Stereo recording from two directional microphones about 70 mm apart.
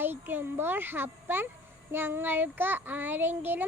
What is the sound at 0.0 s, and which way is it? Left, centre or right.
A child's voice, right.